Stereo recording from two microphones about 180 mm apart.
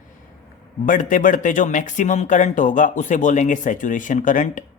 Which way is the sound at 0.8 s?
45° left (ahead or behind).